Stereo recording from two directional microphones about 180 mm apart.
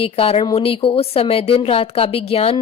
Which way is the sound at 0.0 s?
30° left (ahead or behind).